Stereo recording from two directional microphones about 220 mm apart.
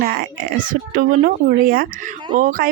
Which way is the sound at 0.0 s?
40° right (ahead or behind).